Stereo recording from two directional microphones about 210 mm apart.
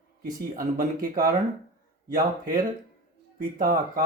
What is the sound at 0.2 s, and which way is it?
Speech, 45° right (ahead or behind).